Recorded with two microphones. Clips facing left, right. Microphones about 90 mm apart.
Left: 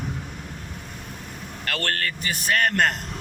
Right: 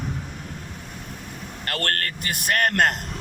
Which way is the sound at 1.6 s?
45° right (ahead or behind).